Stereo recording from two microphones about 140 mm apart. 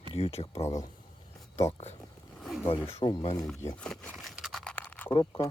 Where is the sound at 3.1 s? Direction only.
40° left (ahead or behind).